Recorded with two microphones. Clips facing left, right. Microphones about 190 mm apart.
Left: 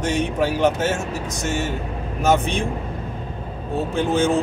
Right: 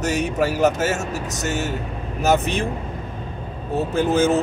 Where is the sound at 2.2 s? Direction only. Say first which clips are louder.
Even; 5° right (ahead or behind).